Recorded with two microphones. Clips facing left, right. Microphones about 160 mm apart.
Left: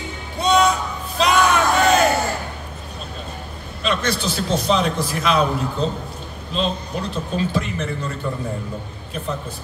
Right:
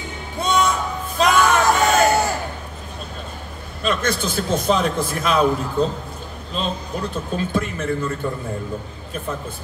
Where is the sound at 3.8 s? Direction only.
50° right (ahead or behind).